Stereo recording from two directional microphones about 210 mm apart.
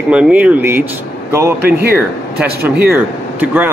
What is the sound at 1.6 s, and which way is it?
Speech, 50° right (ahead or behind).